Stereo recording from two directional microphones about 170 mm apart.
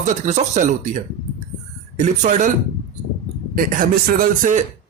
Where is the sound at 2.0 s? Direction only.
50° right (ahead or behind).